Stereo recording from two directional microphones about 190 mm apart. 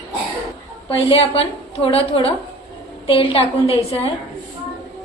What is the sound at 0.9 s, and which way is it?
A woman's voice, 30° left (ahead or behind).